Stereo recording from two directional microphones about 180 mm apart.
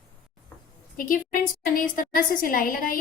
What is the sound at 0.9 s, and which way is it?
A woman's voice, 50° left (ahead or behind).